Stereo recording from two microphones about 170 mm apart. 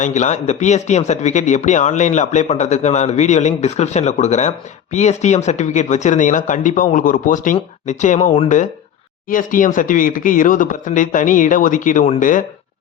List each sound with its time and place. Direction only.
0.0 s speech: 45° left (ahead or behind)